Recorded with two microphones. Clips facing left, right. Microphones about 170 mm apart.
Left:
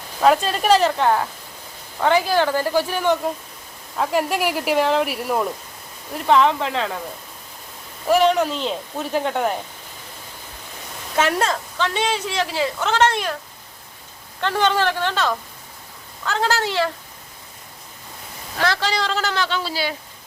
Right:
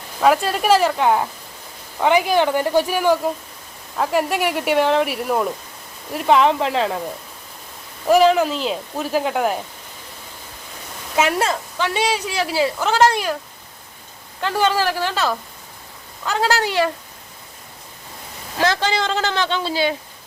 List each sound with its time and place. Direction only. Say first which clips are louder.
0.2 s speech: even; 5° right (ahead or behind)
6.1 s speech: right 1 dB; 10° right (ahead or behind)
6.7 s a man's voice: right 4 dB; 30° right (ahead or behind)
8.0 s speech: right 3 dB; centre (ahead or behind)
11.2 s speech: right 1 dB; 5° right (ahead or behind)
14.4 s speech: even; 5° right (ahead or behind)
18.6 s a man's voice: right 2 dB; 20° right (ahead or behind)